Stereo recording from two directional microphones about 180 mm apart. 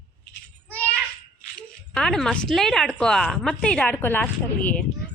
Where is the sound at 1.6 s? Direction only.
5° left (ahead or behind).